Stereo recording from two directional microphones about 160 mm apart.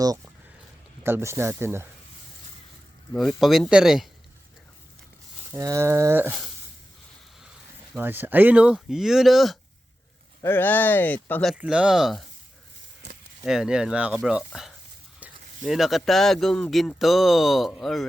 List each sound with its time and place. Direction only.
1.0 s a sound: 15° right (ahead or behind)
3.1 s speech: centre (ahead or behind)
5.5 s a sound: 20° right (ahead or behind)
7.9 s speech: 10° right (ahead or behind)
10.4 s speech: 15° left (ahead or behind)
11.5 s speech: 5° right (ahead or behind)
13.4 s speech: 5° right (ahead or behind)